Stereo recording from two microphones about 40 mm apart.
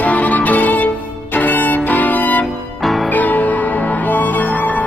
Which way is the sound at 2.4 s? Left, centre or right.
Centre.